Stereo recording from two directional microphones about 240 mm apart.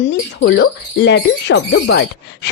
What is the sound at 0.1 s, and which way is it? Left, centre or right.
Speech, left.